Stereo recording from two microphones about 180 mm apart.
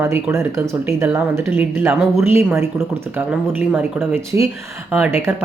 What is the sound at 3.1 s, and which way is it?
Speech, 10° right (ahead or behind).